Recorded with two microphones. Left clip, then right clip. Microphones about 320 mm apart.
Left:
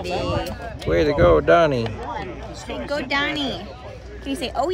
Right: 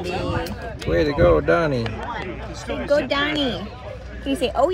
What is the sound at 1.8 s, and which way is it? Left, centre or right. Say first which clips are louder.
Speech: even; left.